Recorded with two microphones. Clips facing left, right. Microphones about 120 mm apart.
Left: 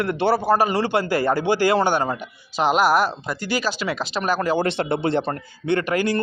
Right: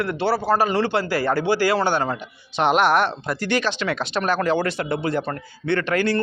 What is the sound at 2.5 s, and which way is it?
Speech, centre (ahead or behind).